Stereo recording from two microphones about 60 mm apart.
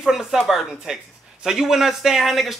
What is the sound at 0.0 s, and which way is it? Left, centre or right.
A man's voice, centre.